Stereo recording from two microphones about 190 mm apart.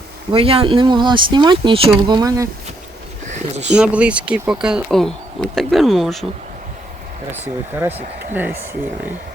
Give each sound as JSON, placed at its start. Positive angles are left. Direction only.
{"t": 0.3, "sound": "speech", "side_deg": -30}
{"t": 3.2, "sound": "a sound", "side_deg": -40}
{"t": 3.7, "sound": "speech", "side_deg": -5}
{"t": 8.3, "sound": "speech", "side_deg": -10}